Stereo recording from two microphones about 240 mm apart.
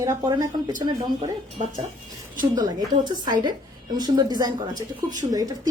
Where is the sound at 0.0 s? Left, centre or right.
Centre.